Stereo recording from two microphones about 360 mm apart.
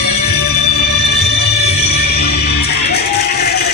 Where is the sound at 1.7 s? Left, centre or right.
Left.